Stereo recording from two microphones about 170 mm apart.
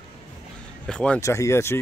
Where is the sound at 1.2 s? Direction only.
15° left (ahead or behind).